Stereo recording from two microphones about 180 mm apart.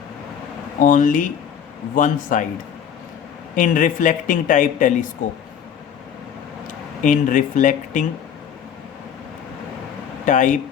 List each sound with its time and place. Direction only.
0.8 s speech: 45° left (ahead or behind)
3.5 s speech: 45° left (ahead or behind)
7.0 s speech: 45° left (ahead or behind)
10.2 s speech: 45° left (ahead or behind)